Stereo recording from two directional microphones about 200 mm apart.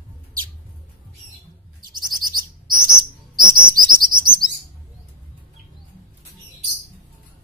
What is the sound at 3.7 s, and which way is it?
Chirp, 45° right (ahead or behind).